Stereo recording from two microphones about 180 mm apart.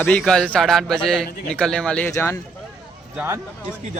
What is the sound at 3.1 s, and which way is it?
Speech, 15° right (ahead or behind).